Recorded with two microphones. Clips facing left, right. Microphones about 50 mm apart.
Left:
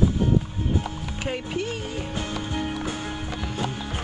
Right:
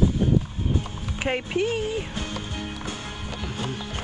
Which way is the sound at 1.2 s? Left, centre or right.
Right.